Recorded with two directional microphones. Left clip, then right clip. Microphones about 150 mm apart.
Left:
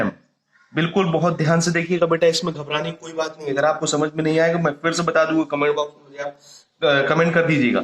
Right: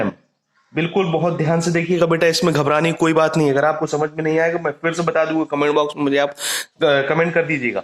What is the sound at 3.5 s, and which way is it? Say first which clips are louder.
Speech: right 3 dB; 40° right (ahead or behind).